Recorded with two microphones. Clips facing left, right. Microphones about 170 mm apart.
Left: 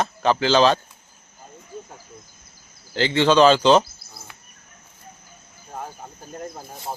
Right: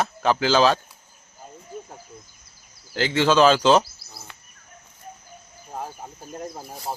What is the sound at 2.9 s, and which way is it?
Speech, 5° right (ahead or behind).